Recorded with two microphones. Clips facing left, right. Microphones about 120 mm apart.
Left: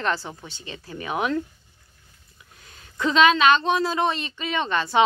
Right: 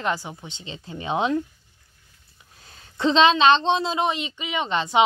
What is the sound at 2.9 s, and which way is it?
Speech, 30° right (ahead or behind).